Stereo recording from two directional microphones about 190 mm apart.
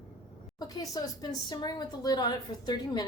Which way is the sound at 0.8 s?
20° left (ahead or behind).